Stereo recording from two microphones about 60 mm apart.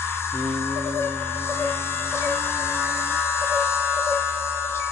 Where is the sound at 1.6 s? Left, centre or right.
Left.